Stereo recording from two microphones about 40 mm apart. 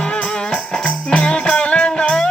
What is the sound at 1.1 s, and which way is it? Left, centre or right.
Music, left.